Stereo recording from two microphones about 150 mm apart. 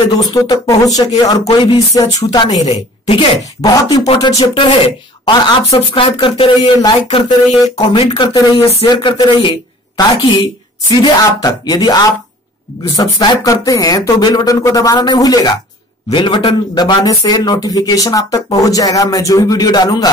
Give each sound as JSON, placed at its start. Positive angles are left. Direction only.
{"t": 0.1, "sound": "a man's voice", "side_deg": 25}
{"t": 2.6, "sound": "speech", "side_deg": 40}
{"t": 4.3, "sound": "speech", "side_deg": 45}
{"t": 7.7, "sound": "a man's voice", "side_deg": 30}